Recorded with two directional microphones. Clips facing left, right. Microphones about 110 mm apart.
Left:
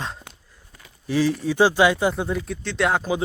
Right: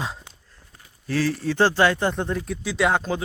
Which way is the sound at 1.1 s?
15° left (ahead or behind).